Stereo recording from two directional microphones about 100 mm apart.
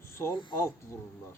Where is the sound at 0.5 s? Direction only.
30° left (ahead or behind).